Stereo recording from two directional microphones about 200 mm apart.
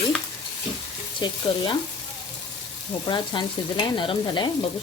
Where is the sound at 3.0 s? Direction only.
20° left (ahead or behind).